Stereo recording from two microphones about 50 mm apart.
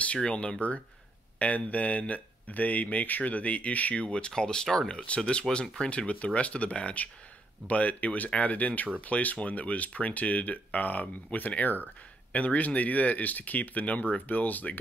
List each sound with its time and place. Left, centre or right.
0.0 s speech: left